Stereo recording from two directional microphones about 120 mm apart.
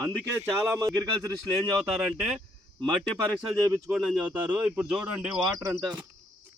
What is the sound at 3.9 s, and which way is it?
Speech, 5° right (ahead or behind).